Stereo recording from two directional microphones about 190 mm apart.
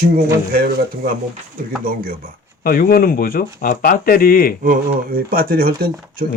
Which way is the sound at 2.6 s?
50° left (ahead or behind).